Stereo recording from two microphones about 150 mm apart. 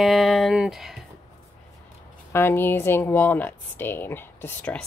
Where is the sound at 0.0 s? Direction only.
Centre (ahead or behind).